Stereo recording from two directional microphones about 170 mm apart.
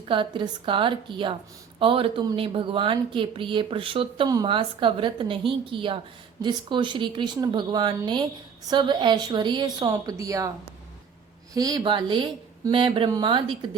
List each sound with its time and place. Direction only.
0.1 s speech: 30° right (ahead or behind)
11.5 s speech: 20° right (ahead or behind)